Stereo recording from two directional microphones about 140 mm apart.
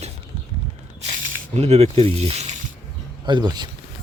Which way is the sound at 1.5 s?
50° right (ahead or behind).